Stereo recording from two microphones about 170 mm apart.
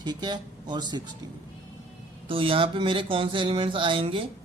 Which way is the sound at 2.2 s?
30° right (ahead or behind).